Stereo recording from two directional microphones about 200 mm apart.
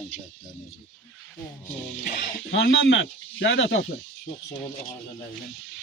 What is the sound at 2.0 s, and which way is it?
Stir, 45° left (ahead or behind).